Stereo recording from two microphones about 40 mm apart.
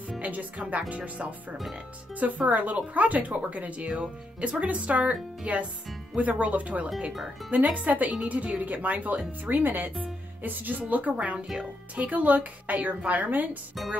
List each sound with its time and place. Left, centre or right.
0.2 s speech: right
7.1 s speech: centre
7.5 s a woman's voice: right
9.5 s a woman's voice: right